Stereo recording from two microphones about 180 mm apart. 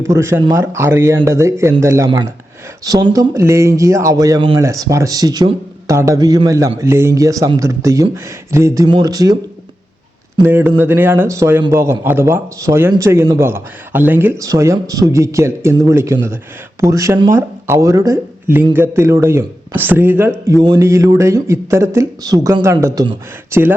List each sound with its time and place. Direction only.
0.0 s speech: 15° right (ahead or behind)
10.4 s speech: 10° right (ahead or behind)